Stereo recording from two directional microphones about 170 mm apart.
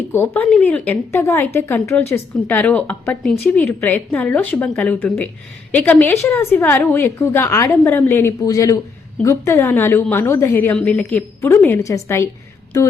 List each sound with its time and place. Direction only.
0.1 s a woman's voice: 10° left (ahead or behind)